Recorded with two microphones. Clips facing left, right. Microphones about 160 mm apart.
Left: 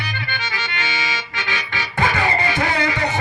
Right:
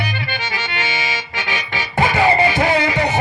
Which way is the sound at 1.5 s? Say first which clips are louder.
Right 2 dB; 15° right (ahead or behind).